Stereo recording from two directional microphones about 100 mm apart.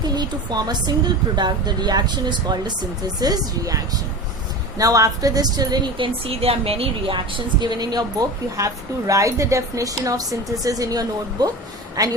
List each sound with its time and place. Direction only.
0.0 s a woman's voice: 45° right (ahead or behind)
4.8 s a woman's voice: 35° right (ahead or behind)
6.0 s a woman's voice: 75° right (ahead or behind); by 11.5 s 40° right (ahead or behind)